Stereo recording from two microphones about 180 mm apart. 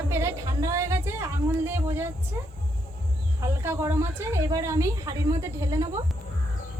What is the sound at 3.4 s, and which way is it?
Speech, 15° right (ahead or behind).